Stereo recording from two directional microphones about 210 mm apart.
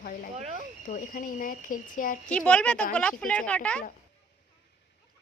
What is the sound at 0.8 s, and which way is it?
Speech, 40° left (ahead or behind).